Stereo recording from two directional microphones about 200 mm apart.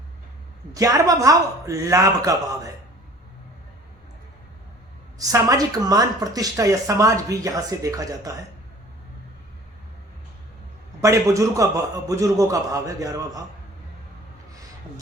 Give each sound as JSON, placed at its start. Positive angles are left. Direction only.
{"t": 0.7, "sound": "speech", "side_deg": -15}
{"t": 5.2, "sound": "speech", "side_deg": -15}
{"t": 11.0, "sound": "speech", "side_deg": -15}